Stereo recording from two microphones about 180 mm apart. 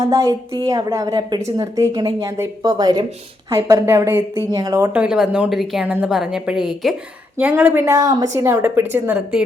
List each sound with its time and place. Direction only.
0.1 s a woman's voice: 20° right (ahead or behind)